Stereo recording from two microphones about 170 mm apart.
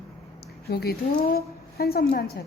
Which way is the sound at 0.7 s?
65° left (ahead or behind).